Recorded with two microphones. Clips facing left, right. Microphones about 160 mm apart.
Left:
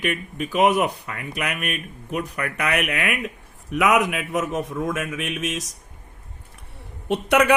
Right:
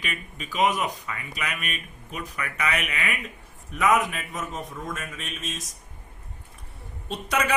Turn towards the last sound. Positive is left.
turn(degrees=65)  # may be behind; listen again after turning